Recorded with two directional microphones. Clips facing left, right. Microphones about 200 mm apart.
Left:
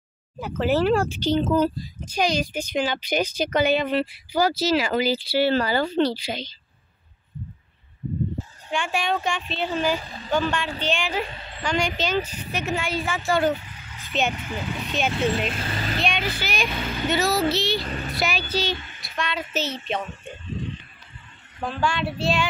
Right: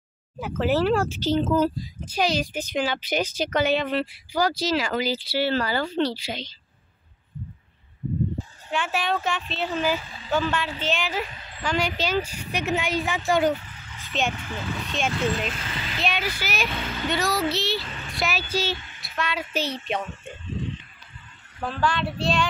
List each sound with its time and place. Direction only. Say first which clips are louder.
0.4 s speech: left 1 dB; 5° right (ahead or behind); by 6.4 s 15° left (ahead or behind)
8.7 s speech: left 1 dB; 5° right (ahead or behind)
13.5 s vehicle: even; centre (ahead or behind)
14.5 s speech: left 2 dB; 5° left (ahead or behind)
15.5 s a child's voice: left 5 dB; 40° left (ahead or behind)
16.0 s a child's voice: right 1 dB; 5° right (ahead or behind)
17.1 s speech: left 3 dB; 5° left (ahead or behind)
17.8 s speech: left 7 dB; 40° left (ahead or behind)
18.2 s speech: even; 5° right (ahead or behind)
21.6 s speech: even; centre (ahead or behind)